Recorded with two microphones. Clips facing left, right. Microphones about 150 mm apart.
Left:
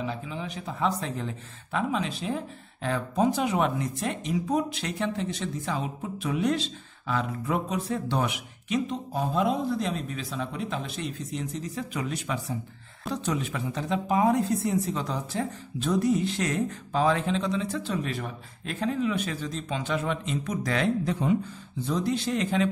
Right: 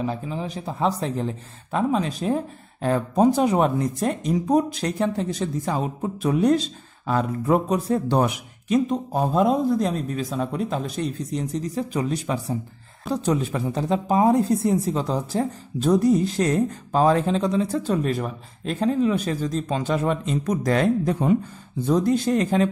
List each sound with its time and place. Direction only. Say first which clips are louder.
0.0 s speech: right 6 dB; 40° right (ahead or behind)